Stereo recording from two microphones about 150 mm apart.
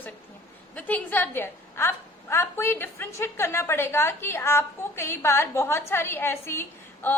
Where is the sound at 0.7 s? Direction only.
10° left (ahead or behind).